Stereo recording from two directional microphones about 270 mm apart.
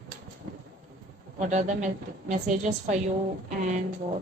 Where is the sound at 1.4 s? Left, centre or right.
Right.